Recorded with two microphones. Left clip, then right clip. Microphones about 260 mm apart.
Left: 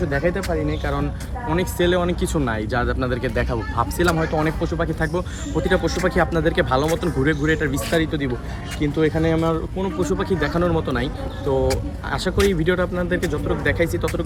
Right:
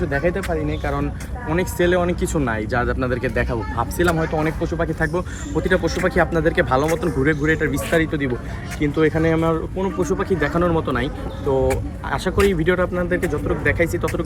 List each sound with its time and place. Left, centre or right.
0.1 s speech: centre